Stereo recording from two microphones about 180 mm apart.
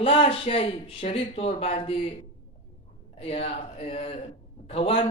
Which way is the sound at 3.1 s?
35° left (ahead or behind).